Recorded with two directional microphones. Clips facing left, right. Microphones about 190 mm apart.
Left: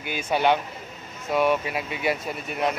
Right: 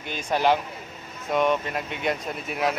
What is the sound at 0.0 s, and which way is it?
Speech, 5° left (ahead or behind).